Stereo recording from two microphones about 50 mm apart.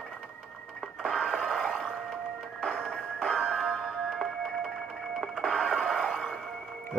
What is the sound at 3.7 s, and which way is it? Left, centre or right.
Music, centre.